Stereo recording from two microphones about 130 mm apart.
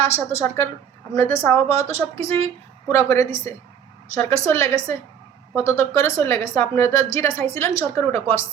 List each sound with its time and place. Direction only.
0.3 s a woman's voice: 20° left (ahead or behind)